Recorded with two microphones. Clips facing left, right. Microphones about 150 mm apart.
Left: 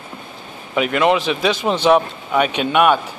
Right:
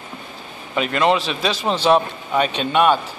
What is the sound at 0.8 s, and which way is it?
A man's voice, 10° left (ahead or behind).